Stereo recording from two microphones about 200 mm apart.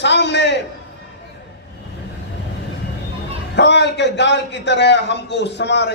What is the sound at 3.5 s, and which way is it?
A man's voice, 60° left (ahead or behind).